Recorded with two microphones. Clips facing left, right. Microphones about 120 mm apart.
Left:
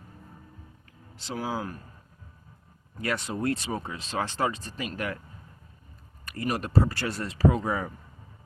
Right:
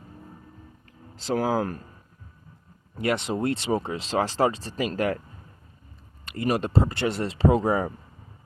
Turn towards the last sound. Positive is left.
turn(degrees=-35)  # may be behind; listen again after turning